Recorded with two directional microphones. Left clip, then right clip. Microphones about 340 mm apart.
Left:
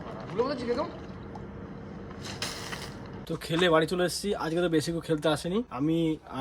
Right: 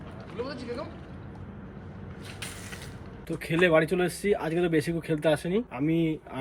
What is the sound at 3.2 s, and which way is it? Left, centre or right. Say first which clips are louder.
Speech: right 2 dB; centre.